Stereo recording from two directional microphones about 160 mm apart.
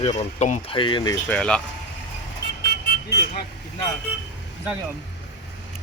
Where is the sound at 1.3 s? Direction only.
5° left (ahead or behind).